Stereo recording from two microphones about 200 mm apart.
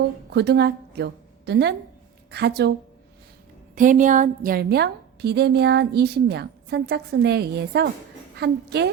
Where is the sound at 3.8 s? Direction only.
40° right (ahead or behind).